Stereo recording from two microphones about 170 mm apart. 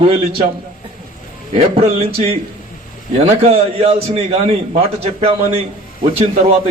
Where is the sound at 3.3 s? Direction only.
35° right (ahead or behind).